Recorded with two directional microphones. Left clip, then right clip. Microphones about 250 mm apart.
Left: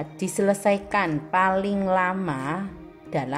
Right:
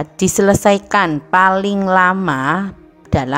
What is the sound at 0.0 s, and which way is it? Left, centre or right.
A woman's voice, right.